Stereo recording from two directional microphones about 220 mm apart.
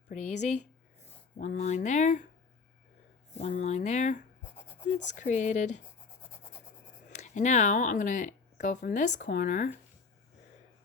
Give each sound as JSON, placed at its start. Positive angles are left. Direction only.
{"t": 0.1, "sound": "speech", "side_deg": 30}
{"t": 3.3, "sound": "speech", "side_deg": 30}
{"t": 7.2, "sound": "speech", "side_deg": 35}